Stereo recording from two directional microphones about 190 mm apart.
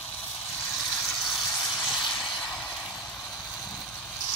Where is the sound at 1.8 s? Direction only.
Centre (ahead or behind).